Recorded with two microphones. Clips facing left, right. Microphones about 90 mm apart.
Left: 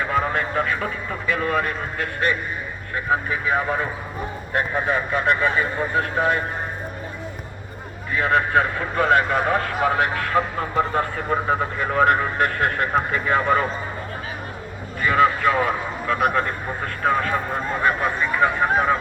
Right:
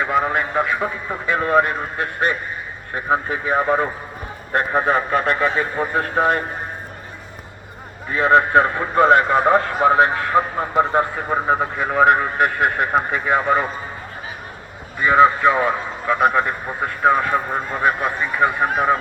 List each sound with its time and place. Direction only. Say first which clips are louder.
0.0 s speech: right 3 dB; 15° right (ahead or behind)
1.3 s a man's voice: right 5 dB; 30° right (ahead or behind)
8.1 s a man's voice: right 5 dB; 30° right (ahead or behind)
15.0 s a man's voice: right 4 dB; 20° right (ahead or behind)